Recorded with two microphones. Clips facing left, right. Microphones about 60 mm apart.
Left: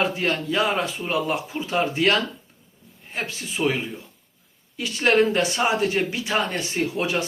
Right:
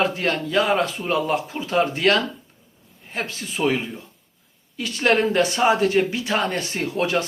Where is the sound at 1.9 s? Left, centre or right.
Centre.